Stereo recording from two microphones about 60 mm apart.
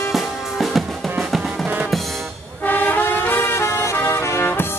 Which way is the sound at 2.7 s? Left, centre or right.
Left.